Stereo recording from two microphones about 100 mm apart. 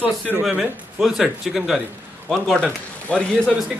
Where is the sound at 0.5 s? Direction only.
5° right (ahead or behind); by 3.5 s 10° left (ahead or behind).